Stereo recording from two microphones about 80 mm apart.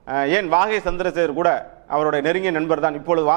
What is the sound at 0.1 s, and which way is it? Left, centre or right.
A man's voice, centre.